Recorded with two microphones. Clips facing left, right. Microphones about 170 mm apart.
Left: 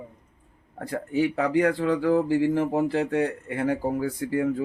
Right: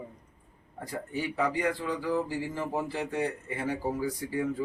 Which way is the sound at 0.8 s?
65° left (ahead or behind).